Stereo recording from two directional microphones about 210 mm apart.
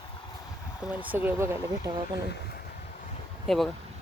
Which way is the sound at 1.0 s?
10° right (ahead or behind).